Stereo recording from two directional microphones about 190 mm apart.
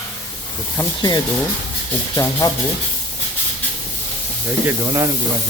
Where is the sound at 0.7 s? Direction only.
20° left (ahead or behind).